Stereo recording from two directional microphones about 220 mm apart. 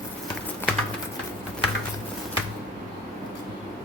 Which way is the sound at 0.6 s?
10° left (ahead or behind).